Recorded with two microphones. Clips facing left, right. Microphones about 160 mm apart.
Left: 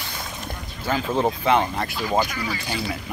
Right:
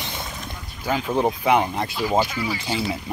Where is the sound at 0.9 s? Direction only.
10° right (ahead or behind).